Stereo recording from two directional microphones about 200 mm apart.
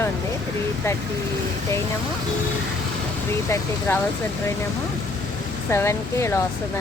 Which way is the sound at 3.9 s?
15° left (ahead or behind).